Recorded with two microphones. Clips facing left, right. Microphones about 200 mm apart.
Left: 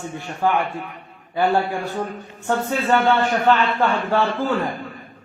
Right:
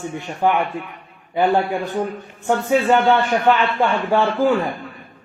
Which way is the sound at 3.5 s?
15° right (ahead or behind).